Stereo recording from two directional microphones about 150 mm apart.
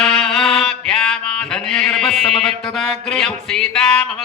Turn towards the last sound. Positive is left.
turn(degrees=5)  # may be behind; listen again after turning